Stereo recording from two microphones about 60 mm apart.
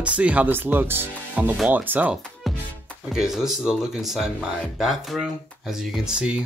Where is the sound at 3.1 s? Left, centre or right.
Centre.